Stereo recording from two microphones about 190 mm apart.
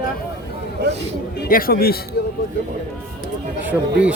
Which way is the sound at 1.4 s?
50° left (ahead or behind).